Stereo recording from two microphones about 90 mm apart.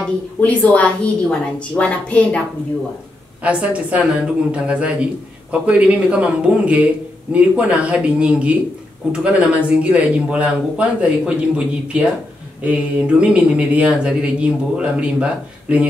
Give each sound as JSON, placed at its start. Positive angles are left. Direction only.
{"t": 0.4, "sound": "a woman's voice", "side_deg": 15}
{"t": 3.4, "sound": "speech", "side_deg": -15}